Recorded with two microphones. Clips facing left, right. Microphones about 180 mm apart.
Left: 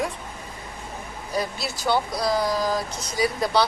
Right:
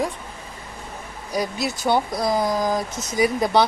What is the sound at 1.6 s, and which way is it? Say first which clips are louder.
Speech: right 4 dB; 20° right (ahead or behind).